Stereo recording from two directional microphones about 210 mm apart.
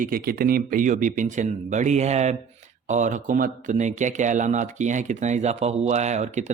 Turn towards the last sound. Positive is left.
turn(degrees=-35)  # may be behind; listen again after turning